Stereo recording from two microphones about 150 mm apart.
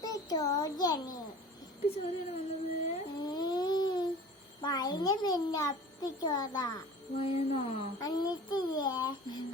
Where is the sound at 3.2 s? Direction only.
25° left (ahead or behind).